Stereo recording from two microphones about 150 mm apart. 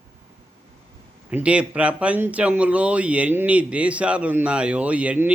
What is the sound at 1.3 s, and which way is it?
Speech, 10° right (ahead or behind).